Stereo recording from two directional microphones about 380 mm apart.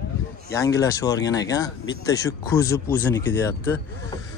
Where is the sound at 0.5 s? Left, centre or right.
Centre.